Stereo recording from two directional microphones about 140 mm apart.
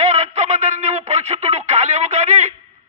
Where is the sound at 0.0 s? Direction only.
50° right (ahead or behind).